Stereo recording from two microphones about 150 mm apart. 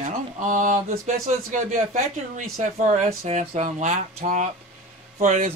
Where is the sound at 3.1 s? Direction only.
45° right (ahead or behind).